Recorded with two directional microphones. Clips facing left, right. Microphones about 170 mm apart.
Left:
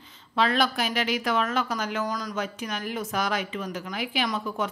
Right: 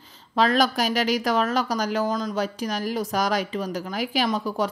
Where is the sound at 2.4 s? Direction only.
35° right (ahead or behind).